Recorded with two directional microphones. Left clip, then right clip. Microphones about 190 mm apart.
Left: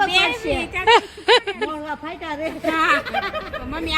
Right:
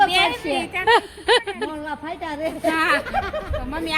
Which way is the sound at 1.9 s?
30° right (ahead or behind).